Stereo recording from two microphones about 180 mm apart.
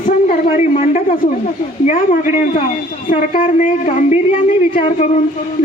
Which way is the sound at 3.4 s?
40° left (ahead or behind).